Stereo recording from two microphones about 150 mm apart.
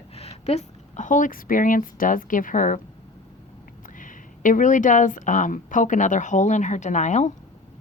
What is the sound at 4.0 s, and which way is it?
Speech, 60° left (ahead or behind).